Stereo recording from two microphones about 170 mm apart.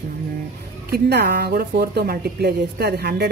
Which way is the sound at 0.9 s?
70° right (ahead or behind).